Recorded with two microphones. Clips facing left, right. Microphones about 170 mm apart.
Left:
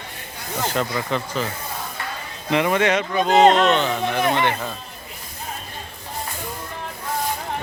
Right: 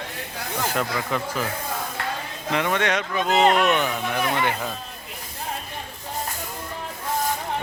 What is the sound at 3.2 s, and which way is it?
Speech, 35° left (ahead or behind).